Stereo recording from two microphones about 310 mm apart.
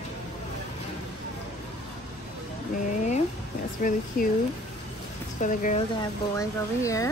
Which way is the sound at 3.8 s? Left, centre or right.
Left.